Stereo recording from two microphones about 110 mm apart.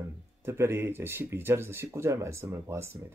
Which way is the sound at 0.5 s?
25° right (ahead or behind).